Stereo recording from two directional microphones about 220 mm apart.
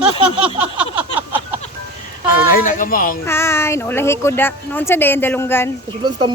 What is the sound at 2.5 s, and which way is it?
Speech, 40° left (ahead or behind).